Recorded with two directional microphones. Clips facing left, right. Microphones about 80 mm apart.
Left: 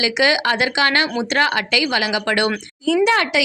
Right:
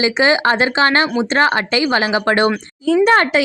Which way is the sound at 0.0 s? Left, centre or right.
Right.